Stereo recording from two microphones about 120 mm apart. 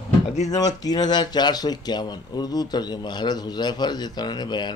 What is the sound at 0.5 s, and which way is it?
Speech, 30° left (ahead or behind).